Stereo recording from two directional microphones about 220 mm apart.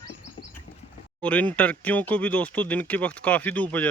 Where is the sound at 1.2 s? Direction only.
5° left (ahead or behind).